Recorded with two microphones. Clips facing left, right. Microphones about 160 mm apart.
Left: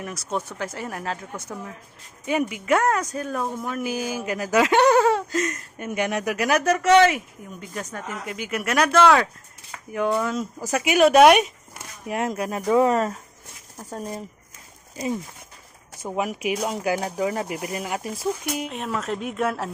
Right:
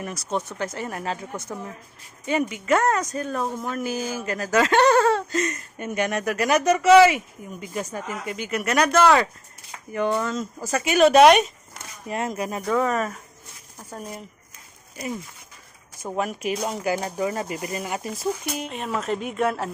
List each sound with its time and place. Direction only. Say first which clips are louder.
0.0 s speech: right 1 dB; 5° left (ahead or behind)
12.6 s speech: left 5 dB; 20° left (ahead or behind)
16.0 s speech: left 1 dB; 10° left (ahead or behind)